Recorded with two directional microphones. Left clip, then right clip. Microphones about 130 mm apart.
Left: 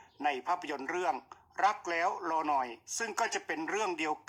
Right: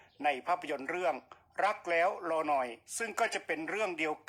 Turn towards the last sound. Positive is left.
turn(degrees=-25)  # may be behind; listen again after turning